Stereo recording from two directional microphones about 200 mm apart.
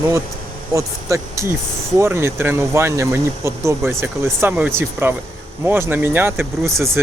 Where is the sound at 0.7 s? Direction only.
15° right (ahead or behind).